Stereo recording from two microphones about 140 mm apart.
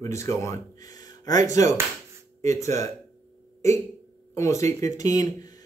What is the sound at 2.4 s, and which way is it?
Speech, 20° left (ahead or behind).